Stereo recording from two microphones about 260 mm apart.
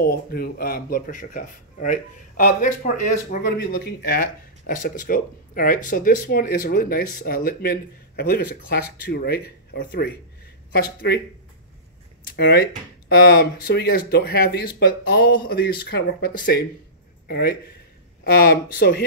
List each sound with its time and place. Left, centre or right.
0.0 s speech: left
12.3 s speech: left